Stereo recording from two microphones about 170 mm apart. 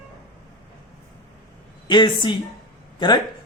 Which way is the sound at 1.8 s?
25° left (ahead or behind).